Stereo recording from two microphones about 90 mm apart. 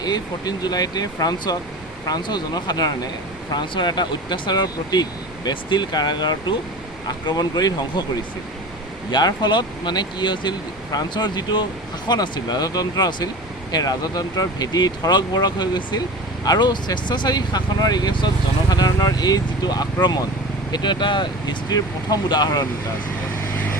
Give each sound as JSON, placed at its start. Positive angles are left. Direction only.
{"t": 0.0, "sound": "speech", "side_deg": 45}
{"t": 9.1, "sound": "speech", "side_deg": 55}